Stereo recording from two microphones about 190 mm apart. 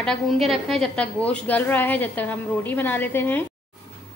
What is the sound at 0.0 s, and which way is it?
A woman's voice, centre (ahead or behind).